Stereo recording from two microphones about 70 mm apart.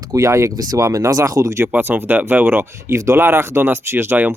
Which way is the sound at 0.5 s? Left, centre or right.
Right.